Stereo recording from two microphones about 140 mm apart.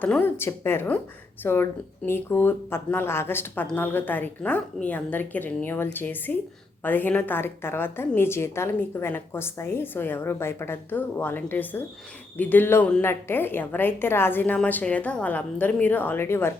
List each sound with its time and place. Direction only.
0.0 s a woman's voice: 15° left (ahead or behind)